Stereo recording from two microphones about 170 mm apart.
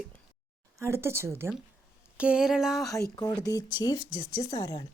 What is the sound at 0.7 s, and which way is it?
A woman's voice, 15° right (ahead or behind).